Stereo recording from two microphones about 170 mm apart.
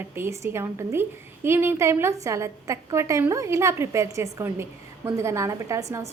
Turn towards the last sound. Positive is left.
turn(degrees=-20)  # may be behind; listen again after turning